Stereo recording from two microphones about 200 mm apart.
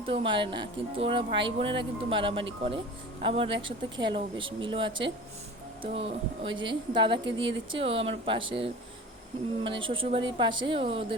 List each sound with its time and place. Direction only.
0.0 s speech: 25° right (ahead or behind)